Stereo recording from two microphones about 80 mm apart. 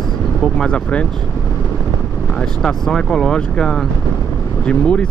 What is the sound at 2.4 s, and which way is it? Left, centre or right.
Speech, centre.